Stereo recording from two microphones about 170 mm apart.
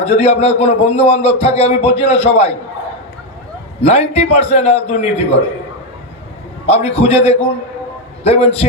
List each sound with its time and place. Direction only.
0.0 s a man's voice: 40° left (ahead or behind)
3.8 s a man's voice: 40° left (ahead or behind)
6.7 s a man's voice: 40° left (ahead or behind)